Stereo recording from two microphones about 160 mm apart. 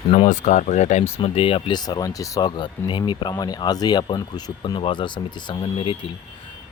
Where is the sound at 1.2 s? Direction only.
35° left (ahead or behind).